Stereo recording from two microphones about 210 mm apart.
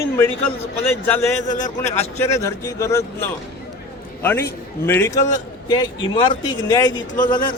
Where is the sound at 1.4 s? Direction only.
35° left (ahead or behind).